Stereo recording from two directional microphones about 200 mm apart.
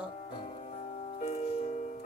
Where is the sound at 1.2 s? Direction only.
35° left (ahead or behind).